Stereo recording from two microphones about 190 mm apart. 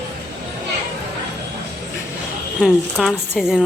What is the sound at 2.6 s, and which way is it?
Speech, centre (ahead or behind).